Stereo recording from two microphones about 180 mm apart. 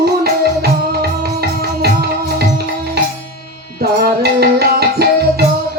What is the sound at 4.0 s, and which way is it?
Music, 60° right (ahead or behind).